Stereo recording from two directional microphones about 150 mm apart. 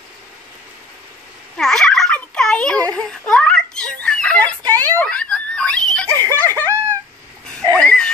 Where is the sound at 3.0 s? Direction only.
5° left (ahead or behind).